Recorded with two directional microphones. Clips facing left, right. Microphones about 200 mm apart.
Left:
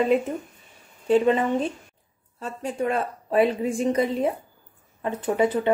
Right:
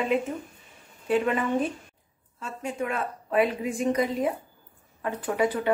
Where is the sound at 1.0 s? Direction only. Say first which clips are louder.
Left 5 dB; 25° left (ahead or behind).